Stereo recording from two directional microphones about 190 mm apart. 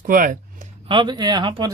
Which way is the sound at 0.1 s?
45° right (ahead or behind).